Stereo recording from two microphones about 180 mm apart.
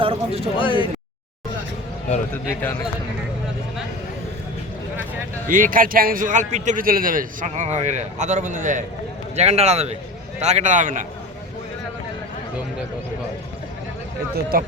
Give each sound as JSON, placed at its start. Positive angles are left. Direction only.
{"t": 0.0, "sound": "speech", "side_deg": -30}
{"t": 0.5, "sound": "speech", "side_deg": 30}
{"t": 5.5, "sound": "a man's voice", "side_deg": -50}
{"t": 14.5, "sound": "speech", "side_deg": -55}